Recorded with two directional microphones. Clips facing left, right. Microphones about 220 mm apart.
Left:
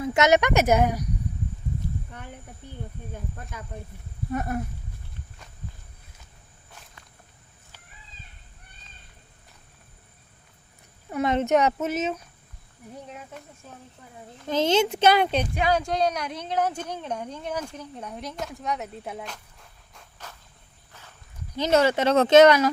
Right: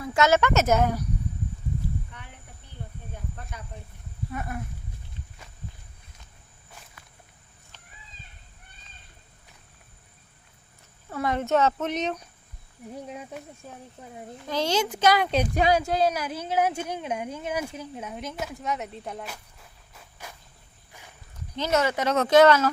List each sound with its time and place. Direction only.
0.0 s speech: 20° left (ahead or behind)
4.3 s speech: 40° left (ahead or behind)
11.1 s speech: 20° left (ahead or behind)
11.9 s a woman's voice: 5° left (ahead or behind)
14.4 s speech: 20° left (ahead or behind)
15.7 s a woman's voice: 5° right (ahead or behind)
19.2 s a sound: 5° right (ahead or behind)
20.9 s walk: 15° right (ahead or behind)
21.7 s speech: 30° left (ahead or behind)